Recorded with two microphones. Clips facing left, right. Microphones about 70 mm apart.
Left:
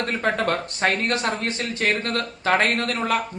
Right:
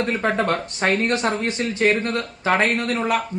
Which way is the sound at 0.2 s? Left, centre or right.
Right.